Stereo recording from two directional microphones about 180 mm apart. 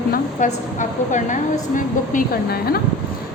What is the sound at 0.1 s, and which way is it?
A woman's voice, 45° left (ahead or behind).